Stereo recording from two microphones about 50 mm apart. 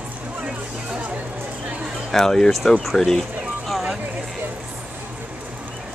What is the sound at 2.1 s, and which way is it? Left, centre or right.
Speech, centre.